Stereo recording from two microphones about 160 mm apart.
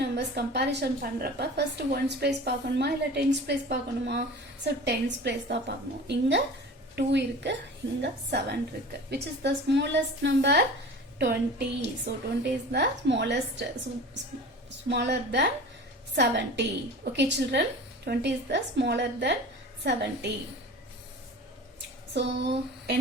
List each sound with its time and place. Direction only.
0.0 s a woman's voice: 90° right
14.8 s a woman's voice: 90° right
22.1 s a sound: 90° right